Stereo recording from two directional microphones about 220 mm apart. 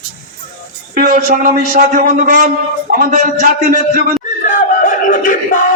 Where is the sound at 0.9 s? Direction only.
40° right (ahead or behind).